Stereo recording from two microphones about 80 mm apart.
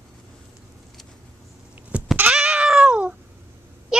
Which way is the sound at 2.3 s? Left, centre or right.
Centre.